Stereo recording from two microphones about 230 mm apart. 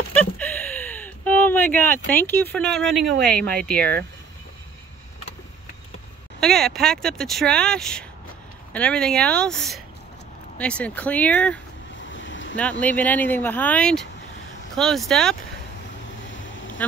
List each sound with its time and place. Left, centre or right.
0.1 s a sound: centre
3.3 s speech: centre
6.4 s speech: centre
12.0 s a sound: left
12.8 s speech: centre
16.3 s vehicle: left